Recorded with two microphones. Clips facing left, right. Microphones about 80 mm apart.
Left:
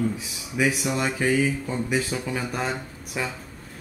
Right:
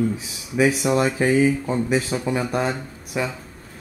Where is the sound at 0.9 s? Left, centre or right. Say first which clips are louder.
Right 5 dB; right.